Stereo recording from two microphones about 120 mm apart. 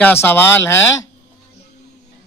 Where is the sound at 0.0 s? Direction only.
15° left (ahead or behind).